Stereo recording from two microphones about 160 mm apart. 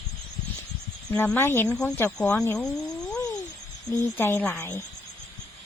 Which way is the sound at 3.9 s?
15° left (ahead or behind).